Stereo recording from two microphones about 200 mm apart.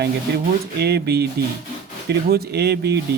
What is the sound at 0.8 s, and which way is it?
Speech, 55° right (ahead or behind).